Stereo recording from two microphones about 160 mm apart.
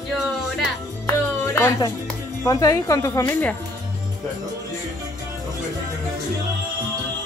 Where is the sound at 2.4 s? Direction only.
20° left (ahead or behind).